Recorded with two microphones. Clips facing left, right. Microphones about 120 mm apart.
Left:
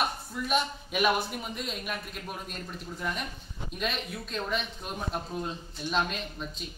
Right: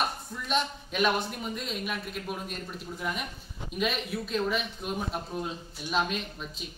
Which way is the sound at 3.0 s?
5° right (ahead or behind).